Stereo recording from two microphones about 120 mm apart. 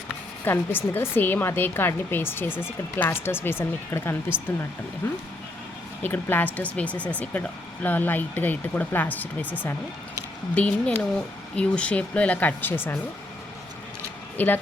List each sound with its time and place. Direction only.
0.4 s a woman's voice: 20° left (ahead or behind)
14.3 s speech: 15° left (ahead or behind)